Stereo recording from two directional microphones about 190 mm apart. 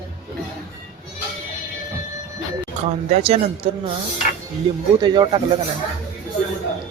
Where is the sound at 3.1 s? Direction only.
30° right (ahead or behind).